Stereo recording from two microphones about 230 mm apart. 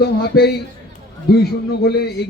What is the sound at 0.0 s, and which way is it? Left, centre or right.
Speech, left.